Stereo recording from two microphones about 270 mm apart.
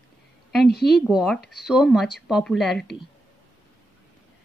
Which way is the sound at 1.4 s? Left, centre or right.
Left.